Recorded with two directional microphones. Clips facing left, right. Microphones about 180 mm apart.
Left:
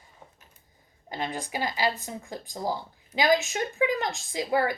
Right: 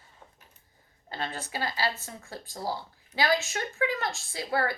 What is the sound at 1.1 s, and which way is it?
Speech, 15° left (ahead or behind).